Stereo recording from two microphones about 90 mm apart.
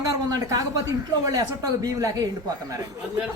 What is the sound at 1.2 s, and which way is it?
A man's voice, 45° right (ahead or behind).